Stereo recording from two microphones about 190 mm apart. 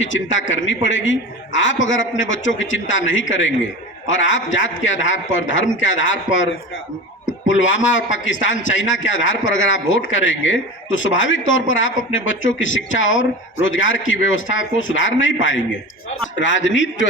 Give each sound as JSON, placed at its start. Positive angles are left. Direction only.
{"t": 0.0, "sound": "a man's voice", "side_deg": 80}